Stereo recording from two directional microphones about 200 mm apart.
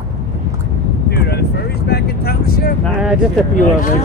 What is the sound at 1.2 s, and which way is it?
Vehicle, 55° left (ahead or behind).